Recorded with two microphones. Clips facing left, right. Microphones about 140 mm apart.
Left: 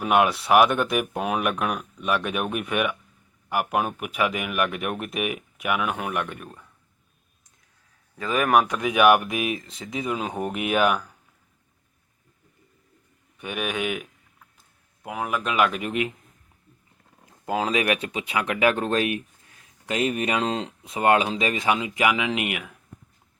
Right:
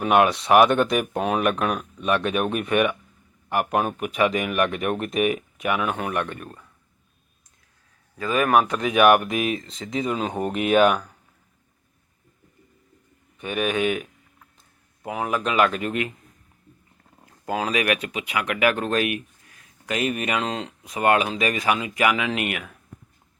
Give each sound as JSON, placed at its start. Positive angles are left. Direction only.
{"t": 0.0, "sound": "speech", "side_deg": 5}
{"t": 8.2, "sound": "speech", "side_deg": 20}
{"t": 13.4, "sound": "speech", "side_deg": 10}
{"t": 15.0, "sound": "speech", "side_deg": 0}
{"t": 17.4, "sound": "speech", "side_deg": 20}